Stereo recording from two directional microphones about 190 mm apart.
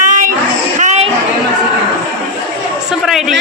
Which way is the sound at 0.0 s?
40° right (ahead or behind).